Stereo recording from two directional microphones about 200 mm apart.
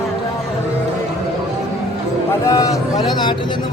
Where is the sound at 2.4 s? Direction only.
15° left (ahead or behind).